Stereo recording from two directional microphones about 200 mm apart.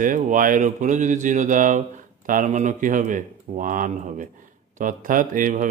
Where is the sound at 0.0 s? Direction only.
40° right (ahead or behind).